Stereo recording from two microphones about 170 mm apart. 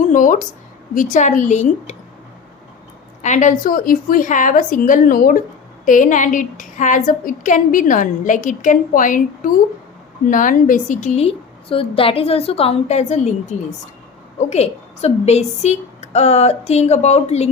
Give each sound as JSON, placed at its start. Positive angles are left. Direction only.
{"t": 0.0, "sound": "a woman's voice", "side_deg": 50}
{"t": 3.2, "sound": "a woman's voice", "side_deg": 45}